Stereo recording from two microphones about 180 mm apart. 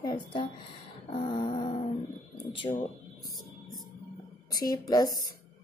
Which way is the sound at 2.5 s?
30° left (ahead or behind).